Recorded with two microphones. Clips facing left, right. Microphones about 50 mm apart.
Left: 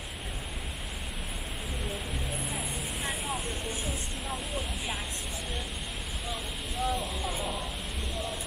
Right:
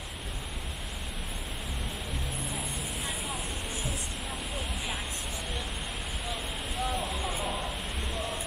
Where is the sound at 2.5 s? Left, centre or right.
Centre.